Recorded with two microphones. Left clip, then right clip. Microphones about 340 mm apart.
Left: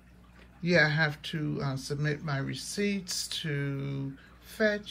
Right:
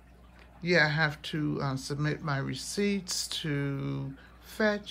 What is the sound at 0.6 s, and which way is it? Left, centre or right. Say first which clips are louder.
Speech: even; centre.